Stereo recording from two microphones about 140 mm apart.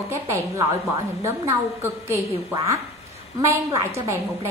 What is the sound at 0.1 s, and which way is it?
A woman's voice, 20° right (ahead or behind).